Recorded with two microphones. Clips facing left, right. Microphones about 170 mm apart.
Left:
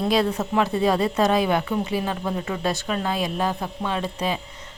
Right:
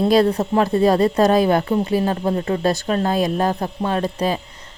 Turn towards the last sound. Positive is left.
turn(degrees=-40)  # may be behind; listen again after turning